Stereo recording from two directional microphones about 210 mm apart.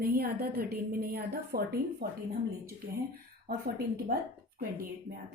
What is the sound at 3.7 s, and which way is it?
Speech, 45° right (ahead or behind).